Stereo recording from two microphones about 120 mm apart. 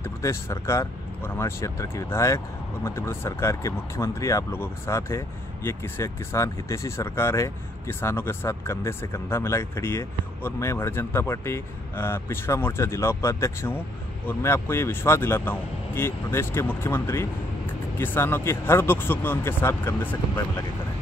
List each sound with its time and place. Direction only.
0.0 s speech: 25° left (ahead or behind)